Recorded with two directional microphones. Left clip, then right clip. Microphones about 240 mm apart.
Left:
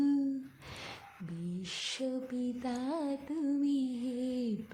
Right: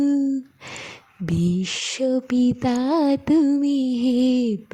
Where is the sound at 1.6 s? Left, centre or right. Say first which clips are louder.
Right 10 dB; right.